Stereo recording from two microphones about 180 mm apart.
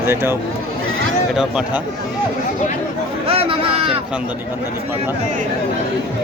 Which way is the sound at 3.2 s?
30° right (ahead or behind).